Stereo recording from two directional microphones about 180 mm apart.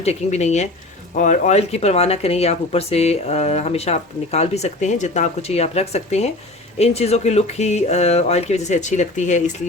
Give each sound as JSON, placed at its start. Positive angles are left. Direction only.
{"t": 0.0, "sound": "speech", "side_deg": 35}